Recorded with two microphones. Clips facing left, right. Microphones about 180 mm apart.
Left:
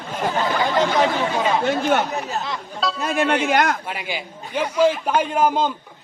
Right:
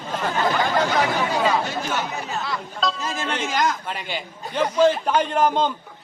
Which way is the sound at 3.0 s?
60° left (ahead or behind).